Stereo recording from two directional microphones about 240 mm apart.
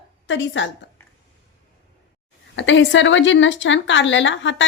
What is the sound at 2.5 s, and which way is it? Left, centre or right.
Speech, left.